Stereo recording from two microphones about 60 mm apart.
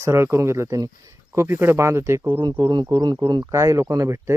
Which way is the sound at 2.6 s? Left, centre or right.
Right.